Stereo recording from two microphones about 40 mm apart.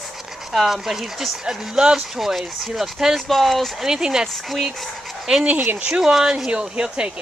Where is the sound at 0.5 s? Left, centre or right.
Centre.